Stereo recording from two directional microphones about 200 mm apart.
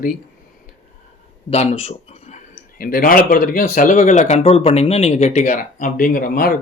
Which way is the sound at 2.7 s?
45° left (ahead or behind).